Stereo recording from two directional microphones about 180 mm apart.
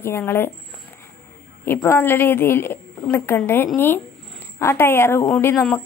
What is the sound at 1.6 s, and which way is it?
Speech, 10° left (ahead or behind).